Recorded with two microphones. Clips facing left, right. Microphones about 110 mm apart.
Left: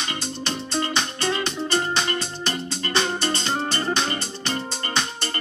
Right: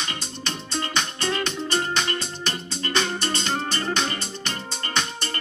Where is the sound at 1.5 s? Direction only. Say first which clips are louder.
Left 2 dB; 35° left (ahead or behind).